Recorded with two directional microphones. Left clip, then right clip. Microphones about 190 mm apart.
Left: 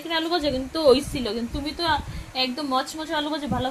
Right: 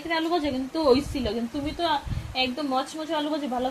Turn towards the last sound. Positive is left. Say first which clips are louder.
# left 1 dB
turn(degrees=-10)  # may be behind; listen again after turning